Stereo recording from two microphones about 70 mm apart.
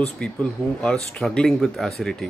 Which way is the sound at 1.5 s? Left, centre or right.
Centre.